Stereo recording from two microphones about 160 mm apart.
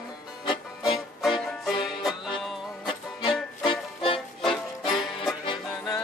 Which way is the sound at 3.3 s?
Centre (ahead or behind).